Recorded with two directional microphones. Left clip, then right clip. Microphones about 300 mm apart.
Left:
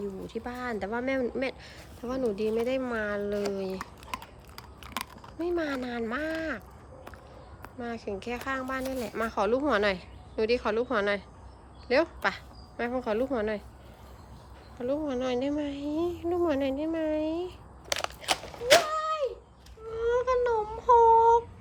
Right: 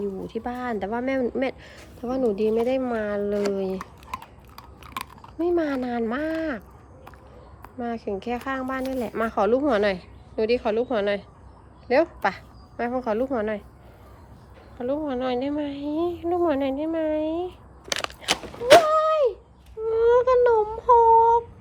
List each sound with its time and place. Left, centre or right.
0.0 s speech: centre
3.5 s typing: centre
7.6 s a woman's voice: centre
14.8 s speech: centre
17.8 s a sound: right
18.7 s a sound: centre